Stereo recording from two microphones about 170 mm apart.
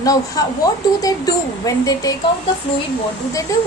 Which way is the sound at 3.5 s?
20° left (ahead or behind).